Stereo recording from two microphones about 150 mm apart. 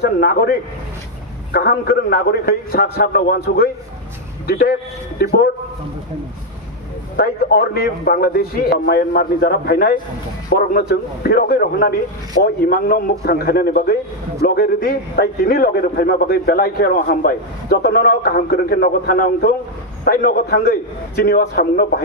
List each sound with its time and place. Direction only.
0.0 s a man's voice: 90° left
7.2 s a man's voice: 90° left
10.5 s a man's voice: 75° left (ahead or behind); by 22.0 s 90° left